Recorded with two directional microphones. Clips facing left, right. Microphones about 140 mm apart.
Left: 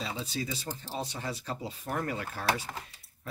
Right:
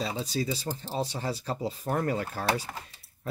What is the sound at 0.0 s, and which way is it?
Speech, 35° right (ahead or behind).